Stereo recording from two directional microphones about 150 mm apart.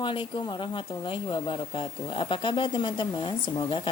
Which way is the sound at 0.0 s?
35° left (ahead or behind).